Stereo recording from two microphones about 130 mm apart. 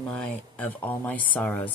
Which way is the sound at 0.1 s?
15° left (ahead or behind).